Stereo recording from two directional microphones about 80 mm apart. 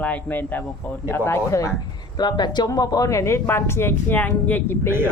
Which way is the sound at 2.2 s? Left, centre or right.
Left.